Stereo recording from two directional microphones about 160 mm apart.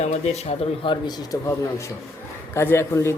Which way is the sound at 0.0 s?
45° left (ahead or behind).